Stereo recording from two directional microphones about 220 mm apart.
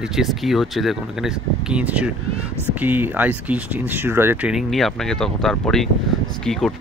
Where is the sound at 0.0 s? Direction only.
Centre (ahead or behind).